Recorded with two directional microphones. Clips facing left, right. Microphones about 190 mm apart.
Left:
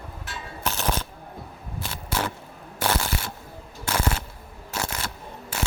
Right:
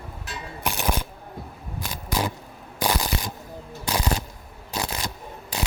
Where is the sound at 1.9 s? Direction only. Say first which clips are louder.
Right 2 dB; 15° right (ahead or behind).